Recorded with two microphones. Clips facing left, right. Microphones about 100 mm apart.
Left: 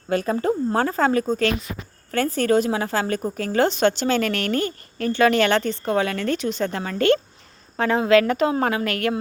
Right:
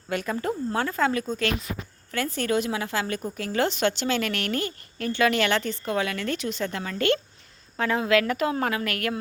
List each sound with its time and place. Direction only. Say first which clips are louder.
0.1 s a woman's voice: left 6 dB; 35° left (ahead or behind)